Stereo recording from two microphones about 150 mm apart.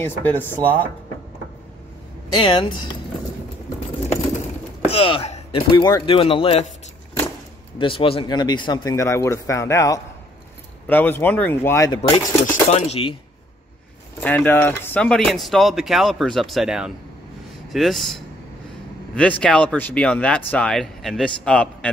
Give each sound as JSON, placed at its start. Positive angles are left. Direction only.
{"t": 0.0, "sound": "speech", "side_deg": 15}
{"t": 2.3, "sound": "speech", "side_deg": 30}
{"t": 4.8, "sound": "chop", "side_deg": 40}
{"t": 5.7, "sound": "speech", "side_deg": 30}
{"t": 7.8, "sound": "speech", "side_deg": 35}
{"t": 8.9, "sound": "speech", "side_deg": 20}
{"t": 11.9, "sound": "speech", "side_deg": 35}
{"t": 12.7, "sound": "speech", "side_deg": 45}
{"t": 14.2, "sound": "speech", "side_deg": 10}